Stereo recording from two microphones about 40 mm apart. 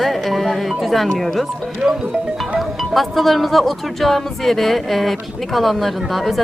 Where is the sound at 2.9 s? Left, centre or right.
Centre.